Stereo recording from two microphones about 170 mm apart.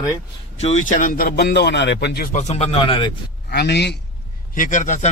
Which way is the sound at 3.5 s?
75° left (ahead or behind).